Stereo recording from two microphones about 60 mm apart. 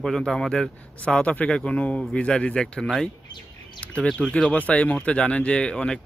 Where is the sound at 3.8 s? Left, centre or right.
Left.